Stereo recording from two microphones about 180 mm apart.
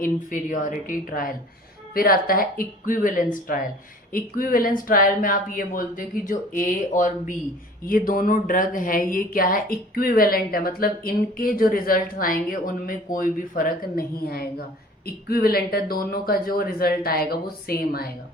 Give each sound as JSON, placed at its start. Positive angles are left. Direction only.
{"t": 0.0, "sound": "speech", "side_deg": 50}